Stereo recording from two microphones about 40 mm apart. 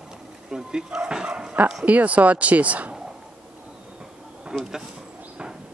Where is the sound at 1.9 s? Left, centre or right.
Right.